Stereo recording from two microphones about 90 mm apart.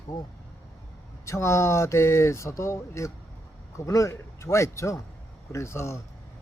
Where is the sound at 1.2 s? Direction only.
30° left (ahead or behind).